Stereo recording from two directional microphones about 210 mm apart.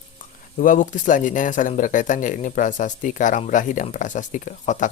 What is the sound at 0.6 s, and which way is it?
Speech, 40° left (ahead or behind).